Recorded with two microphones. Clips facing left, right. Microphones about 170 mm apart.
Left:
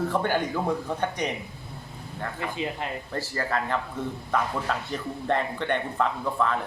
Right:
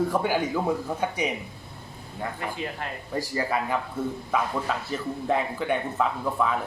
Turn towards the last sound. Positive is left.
turn(degrees=-5)  # may be behind; listen again after turning